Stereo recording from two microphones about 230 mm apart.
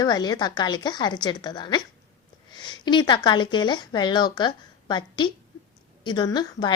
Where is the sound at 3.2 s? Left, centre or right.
Centre.